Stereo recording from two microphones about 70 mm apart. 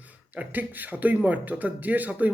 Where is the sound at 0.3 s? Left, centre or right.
Right.